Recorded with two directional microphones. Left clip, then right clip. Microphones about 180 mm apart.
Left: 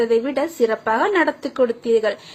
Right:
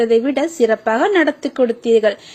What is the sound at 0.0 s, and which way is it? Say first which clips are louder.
Speech: right 4 dB; 35° right (ahead or behind).